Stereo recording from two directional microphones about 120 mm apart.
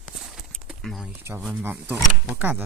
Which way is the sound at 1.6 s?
15° right (ahead or behind).